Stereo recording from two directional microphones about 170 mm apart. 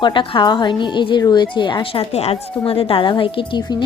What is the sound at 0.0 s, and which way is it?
A woman's voice, 30° left (ahead or behind).